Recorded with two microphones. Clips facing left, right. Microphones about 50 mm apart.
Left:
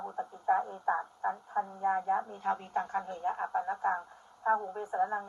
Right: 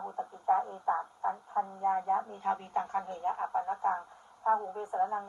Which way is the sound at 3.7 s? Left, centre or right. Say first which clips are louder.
Even; left.